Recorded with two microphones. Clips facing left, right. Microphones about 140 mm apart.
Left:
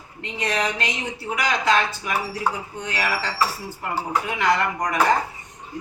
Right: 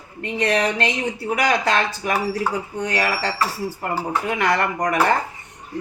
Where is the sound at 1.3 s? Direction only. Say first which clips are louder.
Right 1 dB; 50° right (ahead or behind).